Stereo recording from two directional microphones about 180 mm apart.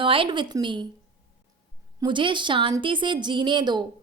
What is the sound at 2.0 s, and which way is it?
A woman's voice, 25° right (ahead or behind).